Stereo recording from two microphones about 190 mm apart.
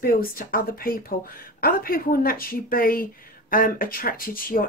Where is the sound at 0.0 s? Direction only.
50° left (ahead or behind).